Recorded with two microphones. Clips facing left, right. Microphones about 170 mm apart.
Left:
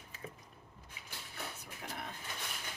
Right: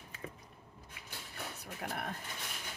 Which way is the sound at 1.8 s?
60° right (ahead or behind).